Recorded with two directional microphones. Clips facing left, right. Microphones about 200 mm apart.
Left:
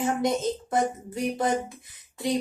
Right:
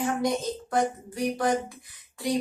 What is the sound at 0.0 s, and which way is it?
Speech, 20° left (ahead or behind).